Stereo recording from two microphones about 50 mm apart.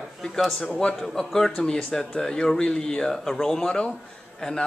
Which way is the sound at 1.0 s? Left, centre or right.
Centre.